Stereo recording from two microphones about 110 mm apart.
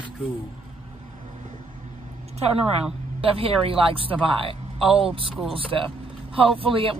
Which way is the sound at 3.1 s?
55° right (ahead or behind).